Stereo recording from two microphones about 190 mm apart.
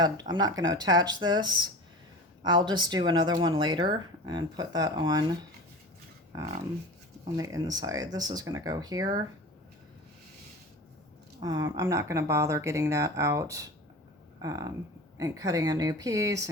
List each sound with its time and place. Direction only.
0.0 s speech: 20° right (ahead or behind)
7.3 s speech: 20° right (ahead or behind)
11.4 s speech: 20° right (ahead or behind)